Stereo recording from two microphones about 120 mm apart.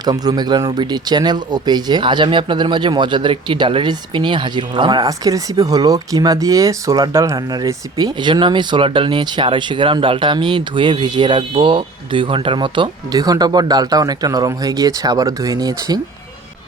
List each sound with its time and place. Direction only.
0.0 s speech: 35° right (ahead or behind)